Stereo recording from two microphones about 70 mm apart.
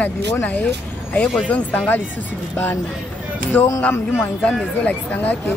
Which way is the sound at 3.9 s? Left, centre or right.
Left.